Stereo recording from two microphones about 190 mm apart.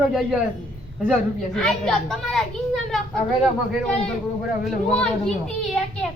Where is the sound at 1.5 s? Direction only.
5° left (ahead or behind).